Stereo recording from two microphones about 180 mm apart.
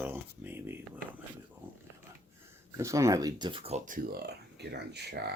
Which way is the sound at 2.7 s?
15° right (ahead or behind).